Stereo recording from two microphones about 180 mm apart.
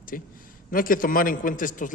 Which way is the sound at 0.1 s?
50° left (ahead or behind).